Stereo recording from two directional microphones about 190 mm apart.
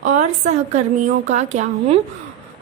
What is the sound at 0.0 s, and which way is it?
A woman's voice, 40° right (ahead or behind).